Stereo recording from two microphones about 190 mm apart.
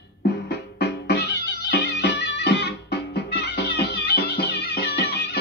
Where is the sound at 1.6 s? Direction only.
65° left (ahead or behind).